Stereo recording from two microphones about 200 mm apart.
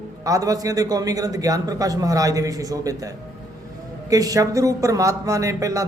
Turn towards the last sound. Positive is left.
turn(degrees=-15)  # may be behind; listen again after turning